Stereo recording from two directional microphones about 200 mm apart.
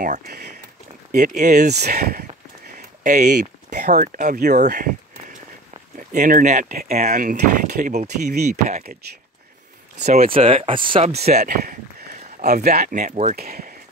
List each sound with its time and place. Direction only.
0.0 s speech: 45° right (ahead or behind)
1.4 s speech: 40° right (ahead or behind)
1.7 s speech: 55° right (ahead or behind)
2.8 s speech: 40° right (ahead or behind)
5.9 s speech: 40° right (ahead or behind)
10.0 s speech: 45° right (ahead or behind)
10.3 s speech: 25° right (ahead or behind)
11.6 s speech: 45° right (ahead or behind)
13.4 s speech: 45° right (ahead or behind)